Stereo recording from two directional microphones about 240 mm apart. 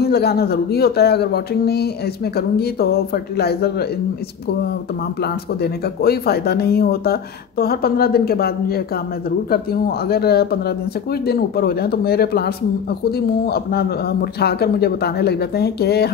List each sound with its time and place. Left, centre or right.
0.0 s speech: left
5.2 s speech: left